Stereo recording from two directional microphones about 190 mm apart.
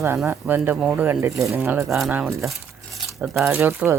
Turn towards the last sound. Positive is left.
turn(degrees=-15)  # may be behind; listen again after turning